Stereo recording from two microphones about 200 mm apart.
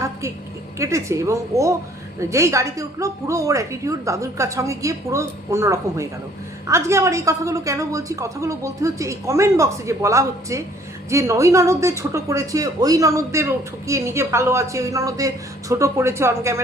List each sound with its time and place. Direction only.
0.8 s a woman's voice: 15° right (ahead or behind)